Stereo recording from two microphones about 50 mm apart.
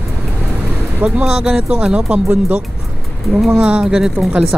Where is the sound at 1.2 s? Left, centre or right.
Centre.